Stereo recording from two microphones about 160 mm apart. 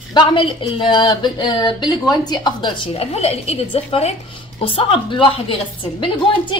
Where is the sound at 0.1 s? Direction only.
30° left (ahead or behind).